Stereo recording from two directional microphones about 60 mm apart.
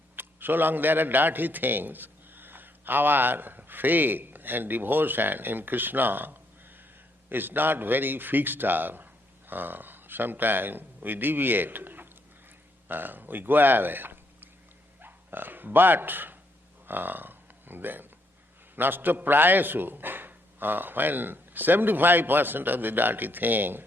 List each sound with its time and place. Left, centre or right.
0.2 s a man's voice: right
16.8 s a sound: right
18.8 s a man's voice: right